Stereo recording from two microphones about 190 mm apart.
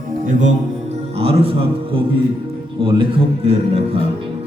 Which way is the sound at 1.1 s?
30° right (ahead or behind).